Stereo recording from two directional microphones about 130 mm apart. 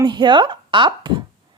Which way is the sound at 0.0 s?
35° right (ahead or behind).